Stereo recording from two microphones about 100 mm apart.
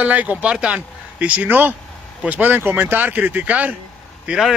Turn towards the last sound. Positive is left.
turn(degrees=-10)  # may be behind; listen again after turning